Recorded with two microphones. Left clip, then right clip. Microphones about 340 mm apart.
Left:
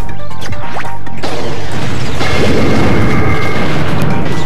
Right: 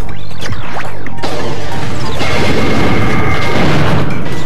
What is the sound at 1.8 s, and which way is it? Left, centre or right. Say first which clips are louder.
Music: even; left.